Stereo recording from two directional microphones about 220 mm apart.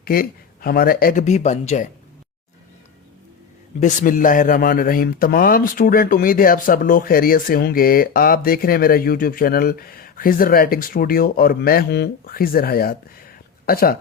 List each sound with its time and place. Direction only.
0.0 s a man's voice: 40° left (ahead or behind)
3.8 s a man's voice: 35° left (ahead or behind)